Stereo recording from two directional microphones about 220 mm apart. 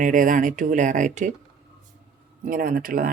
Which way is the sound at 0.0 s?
35° right (ahead or behind).